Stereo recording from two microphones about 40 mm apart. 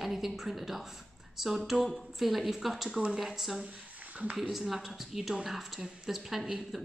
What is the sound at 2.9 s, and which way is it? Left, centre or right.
Speech, right.